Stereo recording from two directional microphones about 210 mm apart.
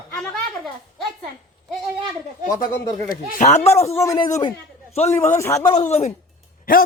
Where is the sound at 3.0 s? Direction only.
40° left (ahead or behind).